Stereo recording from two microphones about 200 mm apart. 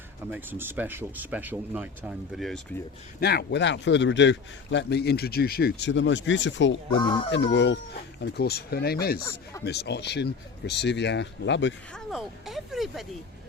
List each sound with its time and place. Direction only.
0.3 s speech: 10° right (ahead or behind)
3.2 s a man's voice: 55° left (ahead or behind)
7.0 s speech: 25° left (ahead or behind)
7.3 s a man's voice: 65° left (ahead or behind)
9.2 s speech: 15° left (ahead or behind)
9.6 s a man's voice: 55° left (ahead or behind)
11.9 s a sound: centre (ahead or behind)